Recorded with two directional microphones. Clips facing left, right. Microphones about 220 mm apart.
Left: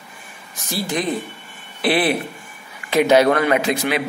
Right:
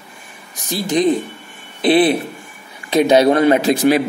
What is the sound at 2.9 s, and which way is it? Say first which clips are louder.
Speech: right 2 dB; 20° right (ahead or behind).